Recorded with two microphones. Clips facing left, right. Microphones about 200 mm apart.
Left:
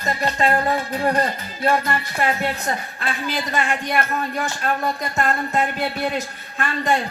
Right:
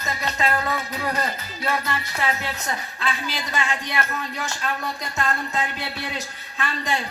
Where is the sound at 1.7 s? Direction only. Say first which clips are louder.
Left 6 dB; 50° left (ahead or behind).